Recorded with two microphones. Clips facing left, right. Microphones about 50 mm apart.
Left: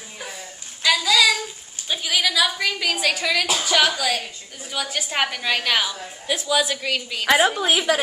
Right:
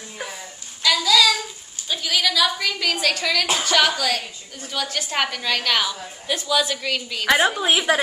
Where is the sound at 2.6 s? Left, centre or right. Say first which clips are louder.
Even; centre.